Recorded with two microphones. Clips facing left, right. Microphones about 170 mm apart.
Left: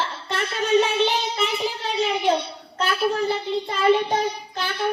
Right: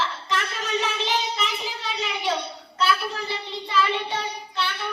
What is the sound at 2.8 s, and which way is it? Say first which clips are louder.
Child singing: left 3 dB; 45° left (ahead or behind).